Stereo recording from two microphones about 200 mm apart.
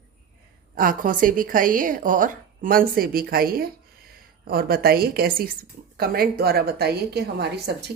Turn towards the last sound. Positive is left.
turn(degrees=-55)  # may be behind; listen again after turning